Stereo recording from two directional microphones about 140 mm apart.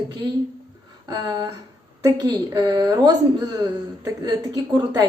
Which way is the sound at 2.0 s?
25° right (ahead or behind).